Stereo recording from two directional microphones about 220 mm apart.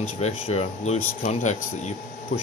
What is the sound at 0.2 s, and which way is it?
Speech, 30° left (ahead or behind).